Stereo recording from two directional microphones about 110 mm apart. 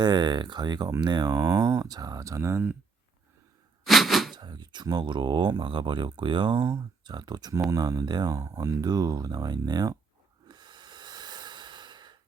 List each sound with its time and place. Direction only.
0.0 s speech: 40° right (ahead or behind)
3.8 s a sound: centre (ahead or behind)
4.4 s speech: 40° right (ahead or behind)
10.5 s breathing: 40° right (ahead or behind)